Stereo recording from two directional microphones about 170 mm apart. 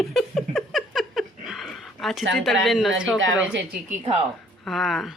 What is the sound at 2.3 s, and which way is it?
Speech, centre (ahead or behind).